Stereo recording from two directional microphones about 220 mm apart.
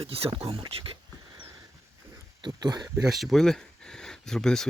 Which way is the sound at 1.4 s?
10° right (ahead or behind).